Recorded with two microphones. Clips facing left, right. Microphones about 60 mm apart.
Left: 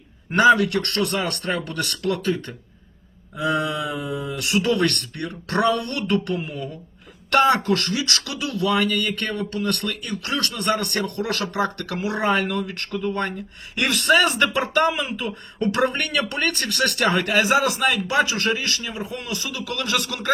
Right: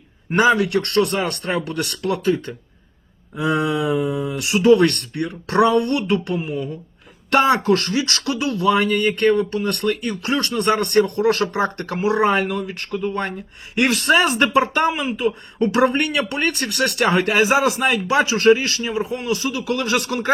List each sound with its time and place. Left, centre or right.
0.3 s speech: centre
7.6 s speech: right
12.3 s speech: centre
13.7 s speech: right
17.1 s speech: right